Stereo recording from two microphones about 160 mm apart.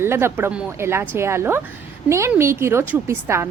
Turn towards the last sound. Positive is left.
turn(degrees=-15)  # may be behind; listen again after turning